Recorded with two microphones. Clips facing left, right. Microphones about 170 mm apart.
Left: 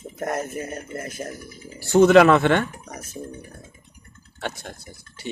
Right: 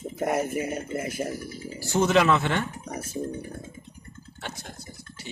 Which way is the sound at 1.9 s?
60° left (ahead or behind).